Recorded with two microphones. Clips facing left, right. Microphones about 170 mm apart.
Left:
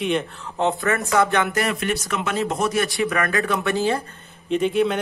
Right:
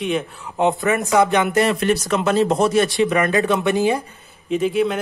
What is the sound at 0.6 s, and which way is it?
Speech, 15° right (ahead or behind).